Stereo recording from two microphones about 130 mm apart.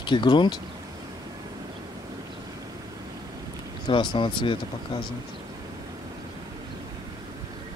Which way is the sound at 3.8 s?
40° left (ahead or behind).